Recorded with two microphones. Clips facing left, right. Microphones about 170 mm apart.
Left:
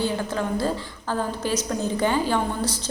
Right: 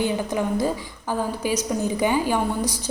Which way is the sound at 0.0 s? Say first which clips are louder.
Right 2 dB; 15° right (ahead or behind).